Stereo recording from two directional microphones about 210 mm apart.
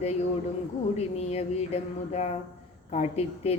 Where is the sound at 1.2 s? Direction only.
30° left (ahead or behind).